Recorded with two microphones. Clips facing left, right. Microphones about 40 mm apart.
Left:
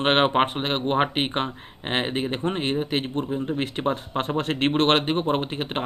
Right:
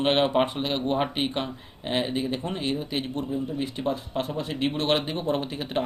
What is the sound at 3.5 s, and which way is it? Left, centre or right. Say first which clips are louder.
Speech: left 3 dB; left.